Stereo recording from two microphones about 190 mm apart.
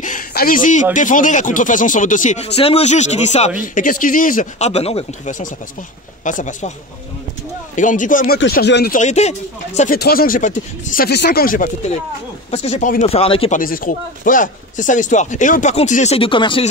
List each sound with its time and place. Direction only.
0.0 s a sound: 50° left (ahead or behind)
0.9 s speech: 45° left (ahead or behind)
7.7 s speech: 40° left (ahead or behind)
8.5 s speech: 60° left (ahead or behind)
8.9 s speech: 35° left (ahead or behind)
9.8 s speech: 50° left (ahead or behind)
12.4 s speech: 35° left (ahead or behind)
13.6 s speech: 45° left (ahead or behind); by 16.6 s 25° left (ahead or behind)